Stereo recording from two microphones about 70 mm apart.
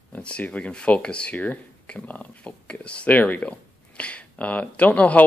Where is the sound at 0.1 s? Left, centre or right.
Centre.